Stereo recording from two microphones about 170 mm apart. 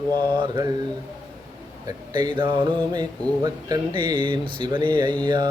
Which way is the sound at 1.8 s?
25° right (ahead or behind).